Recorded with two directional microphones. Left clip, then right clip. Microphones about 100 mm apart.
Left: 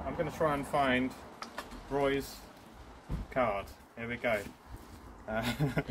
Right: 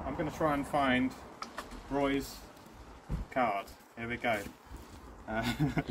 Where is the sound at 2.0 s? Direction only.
55° left (ahead or behind).